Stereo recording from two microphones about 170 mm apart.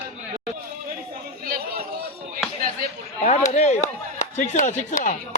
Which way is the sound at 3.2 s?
45° left (ahead or behind).